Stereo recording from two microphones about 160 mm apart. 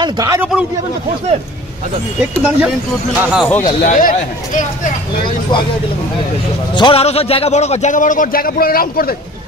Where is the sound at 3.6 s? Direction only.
55° left (ahead or behind).